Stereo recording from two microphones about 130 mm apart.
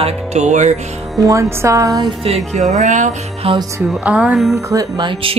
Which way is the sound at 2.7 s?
70° right (ahead or behind).